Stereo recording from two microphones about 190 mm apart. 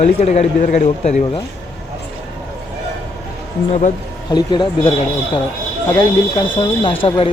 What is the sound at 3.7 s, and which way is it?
Speech, 40° left (ahead or behind).